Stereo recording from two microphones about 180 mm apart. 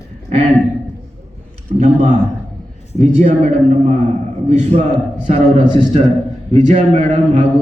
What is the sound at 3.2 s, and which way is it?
A man's voice, 40° right (ahead or behind).